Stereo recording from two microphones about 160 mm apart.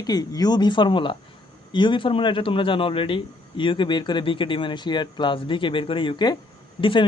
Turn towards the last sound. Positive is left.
turn(degrees=35)  # may be behind; listen again after turning